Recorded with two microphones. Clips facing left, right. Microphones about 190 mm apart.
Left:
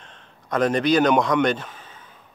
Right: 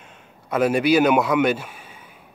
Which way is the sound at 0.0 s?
10° right (ahead or behind).